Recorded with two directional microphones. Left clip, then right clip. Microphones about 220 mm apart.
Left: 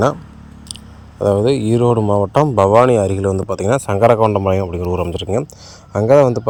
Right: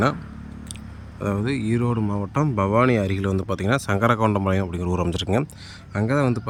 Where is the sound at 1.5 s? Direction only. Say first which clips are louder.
Left 10 dB; 10° left (ahead or behind).